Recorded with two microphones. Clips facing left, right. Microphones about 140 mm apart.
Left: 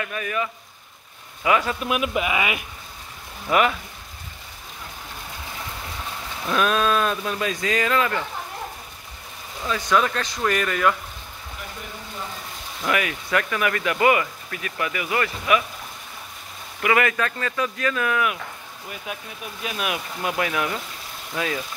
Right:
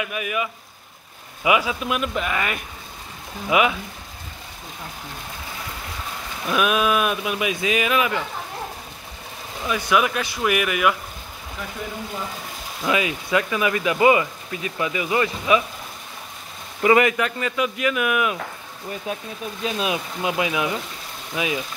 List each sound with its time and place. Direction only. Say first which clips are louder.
0.0 s speech: right 1 dB; 10° right (ahead or behind)
1.6 s speech: even; centre (ahead or behind)
3.4 s speech: right 1 dB; 10° right (ahead or behind)
6.4 s speech: right 1 dB; 10° right (ahead or behind)
9.7 s speech: right 1 dB; 10° right (ahead or behind)
12.8 s speech: right 2 dB; 20° right (ahead or behind)
16.8 s speech: right 4 dB; 20° right (ahead or behind)
19.1 s speech: right 4 dB; 30° right (ahead or behind); by 21.6 s 15° right (ahead or behind)